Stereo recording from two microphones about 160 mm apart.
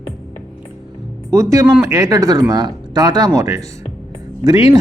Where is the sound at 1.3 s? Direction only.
20° right (ahead or behind).